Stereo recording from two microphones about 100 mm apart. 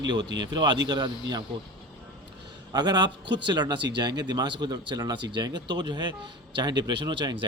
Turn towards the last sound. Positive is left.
turn(degrees=-50)  # may be behind; listen again after turning